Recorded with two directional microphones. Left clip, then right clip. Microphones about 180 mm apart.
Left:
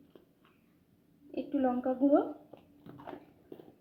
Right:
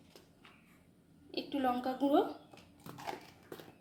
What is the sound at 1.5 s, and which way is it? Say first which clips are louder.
Speech: left 3 dB; 5° left (ahead or behind).